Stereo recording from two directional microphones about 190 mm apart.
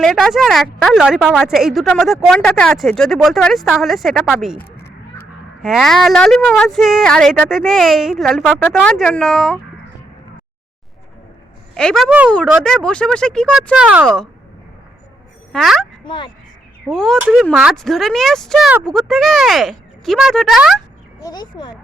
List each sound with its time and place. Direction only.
0.0 s a woman's voice: centre (ahead or behind)
5.6 s a woman's voice: centre (ahead or behind)
11.7 s a woman's voice: 5° left (ahead or behind)
15.5 s a woman's voice: centre (ahead or behind)
16.0 s speech: 25° left (ahead or behind)
16.9 s a woman's voice: centre (ahead or behind)
21.2 s speech: 20° left (ahead or behind)